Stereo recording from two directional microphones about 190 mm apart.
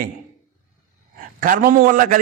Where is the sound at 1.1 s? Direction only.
45° right (ahead or behind).